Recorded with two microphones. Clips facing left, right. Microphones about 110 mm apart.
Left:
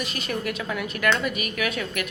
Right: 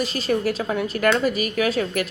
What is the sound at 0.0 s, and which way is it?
A woman's voice, 35° right (ahead or behind).